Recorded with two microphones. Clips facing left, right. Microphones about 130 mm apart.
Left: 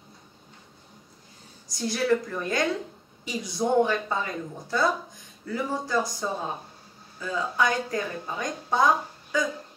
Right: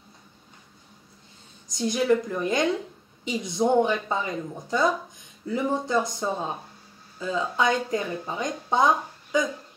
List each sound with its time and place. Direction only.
1.7 s speech: 20° right (ahead or behind)